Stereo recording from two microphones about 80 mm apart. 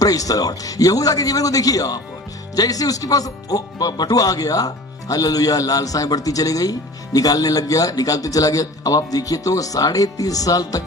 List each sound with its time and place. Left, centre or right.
0.0 s speech: left